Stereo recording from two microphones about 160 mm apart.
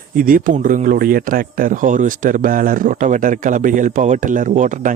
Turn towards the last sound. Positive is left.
turn(degrees=-55)  # may be behind; listen again after turning